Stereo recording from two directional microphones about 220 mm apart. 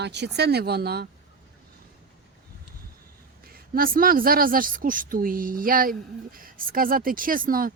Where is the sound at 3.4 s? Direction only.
40° right (ahead or behind).